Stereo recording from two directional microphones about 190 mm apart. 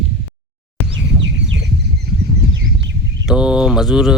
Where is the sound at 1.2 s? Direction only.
70° right (ahead or behind).